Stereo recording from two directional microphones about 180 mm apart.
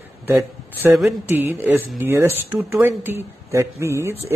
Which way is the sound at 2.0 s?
15° right (ahead or behind).